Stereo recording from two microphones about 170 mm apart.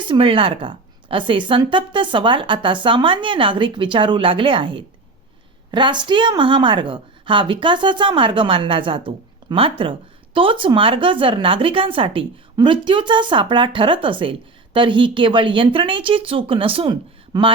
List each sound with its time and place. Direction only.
0.0 s a woman's voice: 30° right (ahead or behind)